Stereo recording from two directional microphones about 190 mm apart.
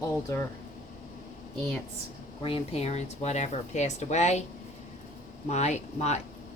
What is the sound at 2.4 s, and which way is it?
Speech, 30° left (ahead or behind).